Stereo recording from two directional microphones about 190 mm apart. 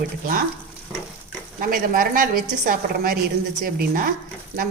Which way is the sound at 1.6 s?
45° right (ahead or behind).